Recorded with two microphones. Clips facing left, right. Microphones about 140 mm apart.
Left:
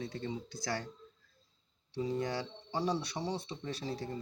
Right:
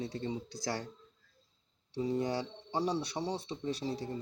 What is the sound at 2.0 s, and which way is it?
Speech, 30° right (ahead or behind).